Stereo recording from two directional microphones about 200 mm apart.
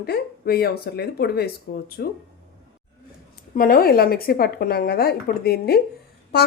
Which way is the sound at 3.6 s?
45° left (ahead or behind).